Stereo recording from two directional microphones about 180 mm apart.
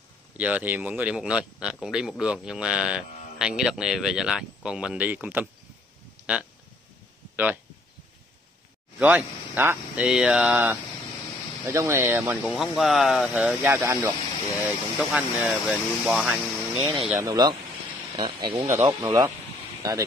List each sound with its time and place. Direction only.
0.4 s a man's voice: 10° right (ahead or behind)
9.0 s a man's voice: 10° right (ahead or behind)
17.2 s speech: 20° right (ahead or behind)